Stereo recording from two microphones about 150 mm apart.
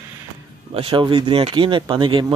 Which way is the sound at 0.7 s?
35° right (ahead or behind).